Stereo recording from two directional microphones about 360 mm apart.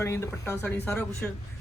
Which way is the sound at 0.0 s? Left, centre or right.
Centre.